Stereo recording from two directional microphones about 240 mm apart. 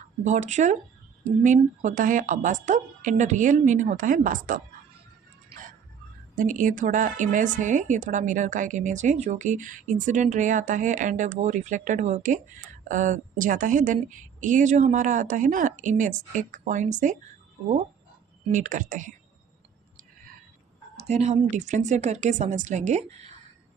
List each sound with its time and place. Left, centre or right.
0.3 s a woman's voice: right
5.5 s a sound: right
6.3 s a woman's voice: right
18.5 s a woman's voice: right
20.9 s speech: right